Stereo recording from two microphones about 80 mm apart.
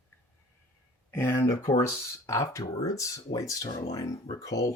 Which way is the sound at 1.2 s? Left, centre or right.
Left.